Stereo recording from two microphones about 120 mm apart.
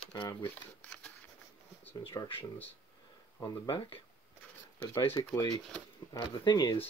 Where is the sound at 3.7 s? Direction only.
40° left (ahead or behind).